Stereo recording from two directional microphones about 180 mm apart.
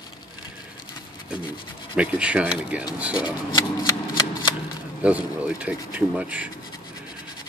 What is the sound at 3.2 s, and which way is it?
Speech, 25° left (ahead or behind).